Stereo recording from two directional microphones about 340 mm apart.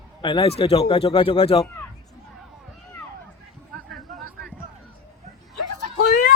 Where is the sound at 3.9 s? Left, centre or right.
Centre.